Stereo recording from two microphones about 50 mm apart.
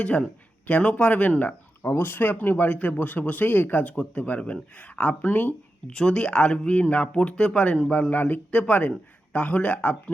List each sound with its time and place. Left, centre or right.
0.0 s speech: left
1.8 s speech: left
2.6 s speech: left
5.9 s speech: centre; by 8.4 s left
8.4 s speech: left